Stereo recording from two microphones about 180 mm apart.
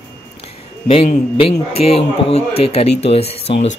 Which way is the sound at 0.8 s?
30° left (ahead or behind).